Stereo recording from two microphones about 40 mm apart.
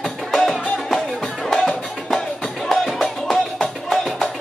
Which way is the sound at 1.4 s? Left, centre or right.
Centre.